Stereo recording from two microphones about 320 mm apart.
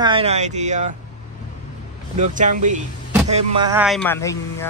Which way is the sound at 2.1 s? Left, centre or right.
Right.